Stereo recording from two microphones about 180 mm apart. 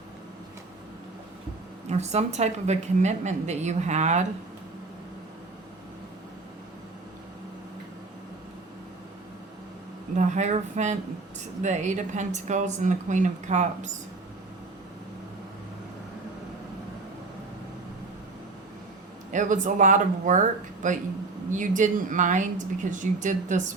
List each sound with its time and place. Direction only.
1.9 s a woman's voice: 40° right (ahead or behind)
10.2 s a woman's voice: 40° right (ahead or behind)
19.3 s a woman's voice: 45° right (ahead or behind)